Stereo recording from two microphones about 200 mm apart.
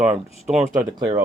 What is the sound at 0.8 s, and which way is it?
Speech, 20° right (ahead or behind).